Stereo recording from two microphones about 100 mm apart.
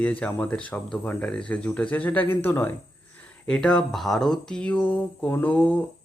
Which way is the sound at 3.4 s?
10° left (ahead or behind).